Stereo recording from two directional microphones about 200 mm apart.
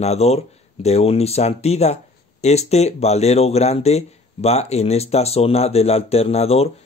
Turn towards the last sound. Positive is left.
turn(degrees=30)  # may be behind; listen again after turning